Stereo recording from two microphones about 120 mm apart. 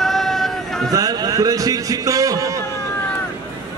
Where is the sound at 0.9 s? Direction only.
30° right (ahead or behind).